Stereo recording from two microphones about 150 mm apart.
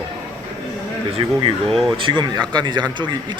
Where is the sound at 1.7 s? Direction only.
Centre (ahead or behind).